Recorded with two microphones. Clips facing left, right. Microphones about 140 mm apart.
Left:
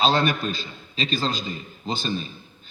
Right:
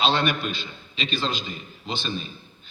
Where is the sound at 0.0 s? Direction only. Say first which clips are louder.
Left 2 dB; 40° left (ahead or behind).